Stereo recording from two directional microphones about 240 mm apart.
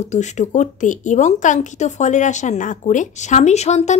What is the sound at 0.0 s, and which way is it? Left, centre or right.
Speech, left.